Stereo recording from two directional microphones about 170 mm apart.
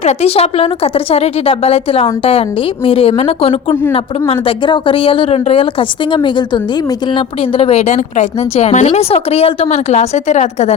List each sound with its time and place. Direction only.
0.0 s a woman's voice: 40° left (ahead or behind)